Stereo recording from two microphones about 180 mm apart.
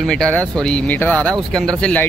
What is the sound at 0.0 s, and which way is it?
Speech, 5° left (ahead or behind).